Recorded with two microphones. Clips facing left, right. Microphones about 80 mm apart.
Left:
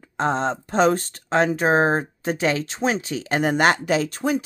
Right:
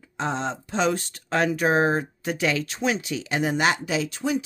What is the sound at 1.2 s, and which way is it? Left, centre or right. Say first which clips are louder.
A woman's voice: left 3 dB; left.